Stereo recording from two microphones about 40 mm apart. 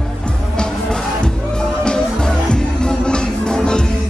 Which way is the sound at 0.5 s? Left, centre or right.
Left.